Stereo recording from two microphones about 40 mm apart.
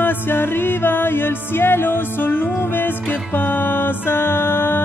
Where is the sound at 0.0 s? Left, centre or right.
Left.